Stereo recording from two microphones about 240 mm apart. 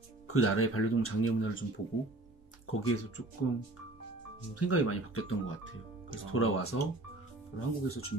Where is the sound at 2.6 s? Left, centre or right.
Left.